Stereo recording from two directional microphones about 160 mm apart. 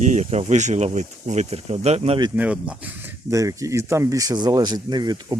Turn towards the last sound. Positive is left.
turn(degrees=-25)  # may be behind; listen again after turning